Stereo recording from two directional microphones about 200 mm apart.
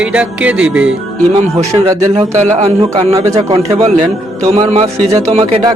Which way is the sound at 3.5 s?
30° right (ahead or behind).